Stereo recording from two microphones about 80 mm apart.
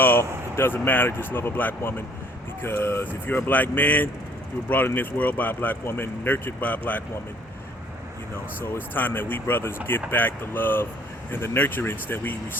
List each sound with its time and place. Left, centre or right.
0.0 s speech: left
8.6 s speech: left